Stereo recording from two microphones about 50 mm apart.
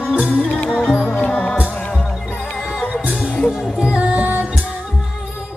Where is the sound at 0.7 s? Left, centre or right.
Centre.